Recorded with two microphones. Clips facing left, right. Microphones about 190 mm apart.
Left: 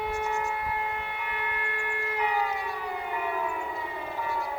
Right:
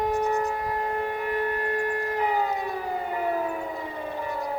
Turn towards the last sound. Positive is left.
turn(degrees=-40)  # may be behind; listen again after turning